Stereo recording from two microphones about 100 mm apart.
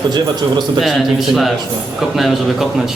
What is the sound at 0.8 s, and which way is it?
A man's voice, centre (ahead or behind).